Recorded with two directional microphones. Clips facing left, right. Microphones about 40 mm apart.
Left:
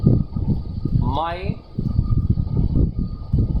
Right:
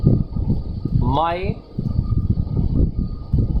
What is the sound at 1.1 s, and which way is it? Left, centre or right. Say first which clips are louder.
Speech: right 6 dB; right.